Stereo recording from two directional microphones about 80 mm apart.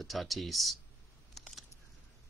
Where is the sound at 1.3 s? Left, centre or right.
Centre.